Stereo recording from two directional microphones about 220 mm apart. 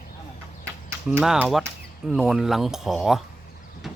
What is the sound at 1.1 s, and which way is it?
Speech, 5° right (ahead or behind).